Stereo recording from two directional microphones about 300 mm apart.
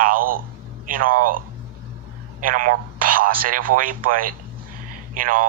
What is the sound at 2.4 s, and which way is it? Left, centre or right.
Speech, right.